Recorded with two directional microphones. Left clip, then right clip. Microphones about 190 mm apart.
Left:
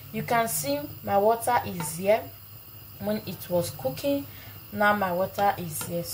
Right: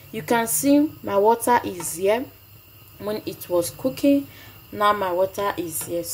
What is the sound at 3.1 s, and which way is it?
Speech, 40° right (ahead or behind).